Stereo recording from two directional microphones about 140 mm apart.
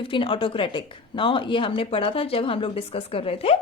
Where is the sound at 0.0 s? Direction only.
40° left (ahead or behind).